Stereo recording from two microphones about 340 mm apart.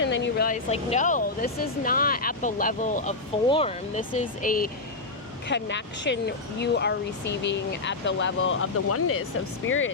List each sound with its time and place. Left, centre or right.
0.0 s speech: left